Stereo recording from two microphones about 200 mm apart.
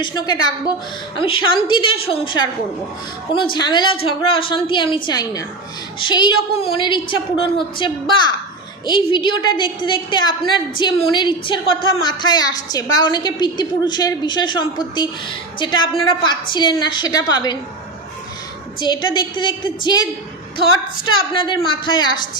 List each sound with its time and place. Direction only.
0.0 s a woman's voice: 20° left (ahead or behind)
18.8 s a woman's voice: 20° left (ahead or behind)